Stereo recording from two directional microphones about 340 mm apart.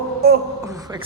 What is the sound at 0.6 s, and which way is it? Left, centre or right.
Speech, centre.